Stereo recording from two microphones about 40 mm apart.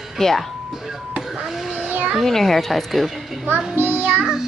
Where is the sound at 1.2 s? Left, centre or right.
Centre.